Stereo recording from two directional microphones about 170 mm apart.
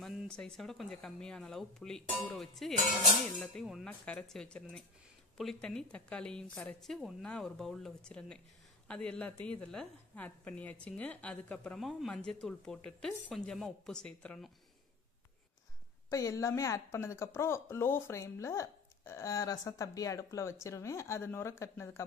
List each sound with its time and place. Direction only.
0.0 s a woman's voice: centre (ahead or behind)
16.1 s a woman's voice: 20° left (ahead or behind)